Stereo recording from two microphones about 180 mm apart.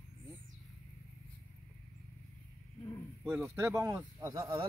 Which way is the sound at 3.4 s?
15° right (ahead or behind).